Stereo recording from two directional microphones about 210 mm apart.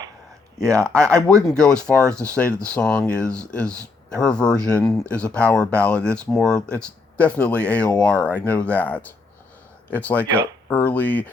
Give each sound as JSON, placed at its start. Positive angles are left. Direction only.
{"t": 0.6, "sound": "speech", "side_deg": 5}